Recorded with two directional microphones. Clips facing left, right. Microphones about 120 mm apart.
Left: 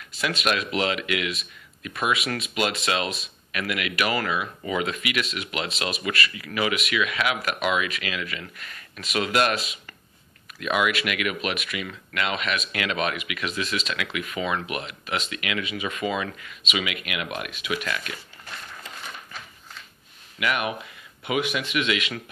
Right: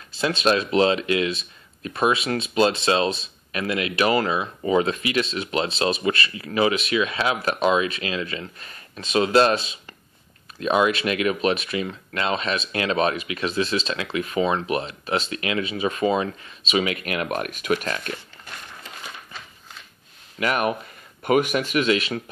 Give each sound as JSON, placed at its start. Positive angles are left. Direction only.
{"t": 0.1, "sound": "speech", "side_deg": -30}
{"t": 20.3, "sound": "speech", "side_deg": -40}